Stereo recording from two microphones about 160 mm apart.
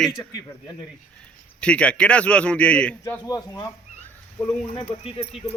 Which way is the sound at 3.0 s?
20° left (ahead or behind).